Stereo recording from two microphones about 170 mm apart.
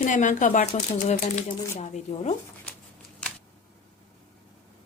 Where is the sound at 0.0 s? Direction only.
45° left (ahead or behind).